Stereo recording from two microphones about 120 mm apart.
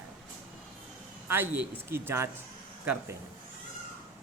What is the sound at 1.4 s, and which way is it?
Speech, 20° right (ahead or behind).